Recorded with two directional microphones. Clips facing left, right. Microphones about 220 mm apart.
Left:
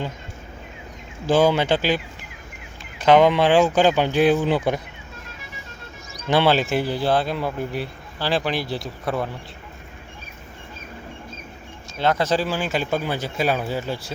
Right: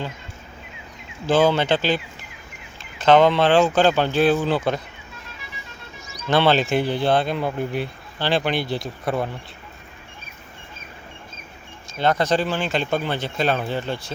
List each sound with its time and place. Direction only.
1.3 s speech: 10° left (ahead or behind)
3.0 s speech: 10° left (ahead or behind)
6.2 s speech: 10° left (ahead or behind)
11.9 s speech: 5° left (ahead or behind)